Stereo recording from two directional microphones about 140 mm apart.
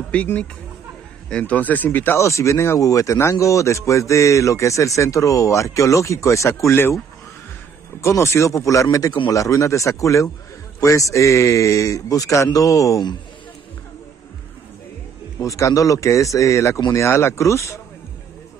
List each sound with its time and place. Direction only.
0.1 s speech: 10° left (ahead or behind)
8.0 s speech: 20° left (ahead or behind)
15.3 s speech: 20° left (ahead or behind)